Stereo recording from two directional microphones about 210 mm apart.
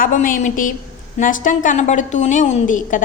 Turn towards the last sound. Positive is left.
turn(degrees=40)  # may be behind; listen again after turning